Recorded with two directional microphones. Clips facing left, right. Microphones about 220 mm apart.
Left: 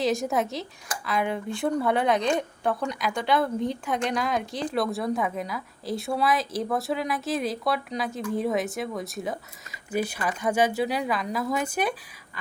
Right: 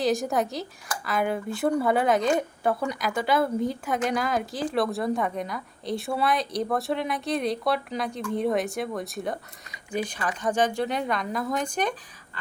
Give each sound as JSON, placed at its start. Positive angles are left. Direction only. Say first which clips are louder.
{"t": 0.0, "sound": "speech", "louder": "even", "side_deg": 0}